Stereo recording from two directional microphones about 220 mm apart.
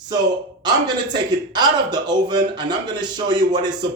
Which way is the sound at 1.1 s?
20° right (ahead or behind).